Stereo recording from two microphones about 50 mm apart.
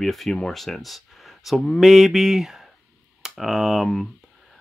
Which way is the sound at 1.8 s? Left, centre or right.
Centre.